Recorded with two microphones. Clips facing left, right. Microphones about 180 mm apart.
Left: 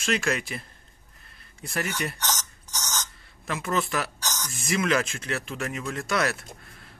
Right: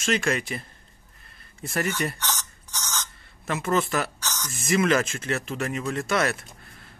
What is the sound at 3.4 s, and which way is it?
Speech, centre (ahead or behind).